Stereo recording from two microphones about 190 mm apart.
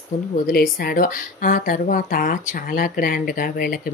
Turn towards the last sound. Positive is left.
turn(degrees=45)  # may be behind; listen again after turning